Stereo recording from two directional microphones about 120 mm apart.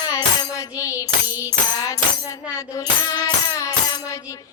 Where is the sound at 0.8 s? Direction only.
30° left (ahead or behind).